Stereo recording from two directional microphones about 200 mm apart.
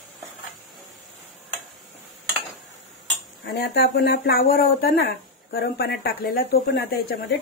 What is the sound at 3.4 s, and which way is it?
Speech, 50° left (ahead or behind).